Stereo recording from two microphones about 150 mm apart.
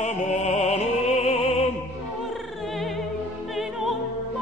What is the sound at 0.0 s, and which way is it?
Music, 50° left (ahead or behind).